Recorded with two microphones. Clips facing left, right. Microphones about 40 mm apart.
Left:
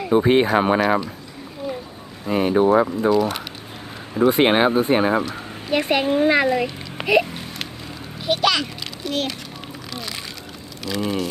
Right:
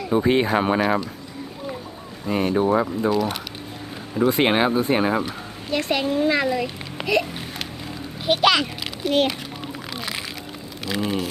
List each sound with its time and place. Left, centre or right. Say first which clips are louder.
0.2 s speech: left 2 dB; centre
2.2 s speech: left 3 dB; centre
4.1 s speech: left 3 dB; centre
5.7 s a child's voice: left 3 dB; left
8.3 s a sound: right 2 dB; centre
9.0 s a child's voice: right 5 dB; right
9.9 s a sound: even; centre
10.8 s speech: left 1 dB; centre